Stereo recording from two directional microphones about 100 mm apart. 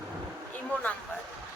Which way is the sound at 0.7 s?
15° left (ahead or behind).